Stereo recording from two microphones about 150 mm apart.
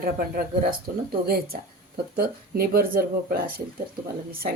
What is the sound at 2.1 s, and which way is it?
A woman's voice, 90° right.